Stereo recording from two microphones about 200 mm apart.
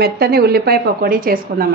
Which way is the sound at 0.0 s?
50° right (ahead or behind).